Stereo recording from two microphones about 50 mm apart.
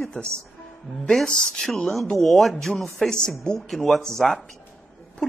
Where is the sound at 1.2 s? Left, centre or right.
Centre.